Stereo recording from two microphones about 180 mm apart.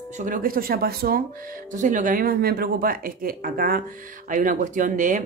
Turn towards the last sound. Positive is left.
turn(degrees=-45)  # may be behind; listen again after turning